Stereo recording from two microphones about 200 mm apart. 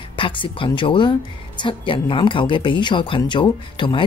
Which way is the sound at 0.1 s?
25° left (ahead or behind).